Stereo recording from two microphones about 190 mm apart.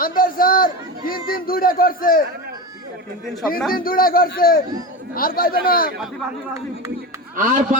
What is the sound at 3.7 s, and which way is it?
A man's voice, 50° left (ahead or behind).